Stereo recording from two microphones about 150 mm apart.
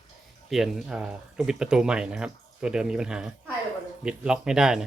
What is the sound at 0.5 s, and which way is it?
Speech, centre (ahead or behind).